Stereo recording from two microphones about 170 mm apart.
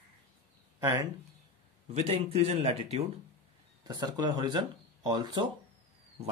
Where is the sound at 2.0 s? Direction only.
35° right (ahead or behind).